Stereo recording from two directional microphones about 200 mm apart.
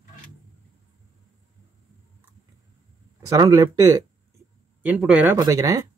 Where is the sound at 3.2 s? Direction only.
20° right (ahead or behind).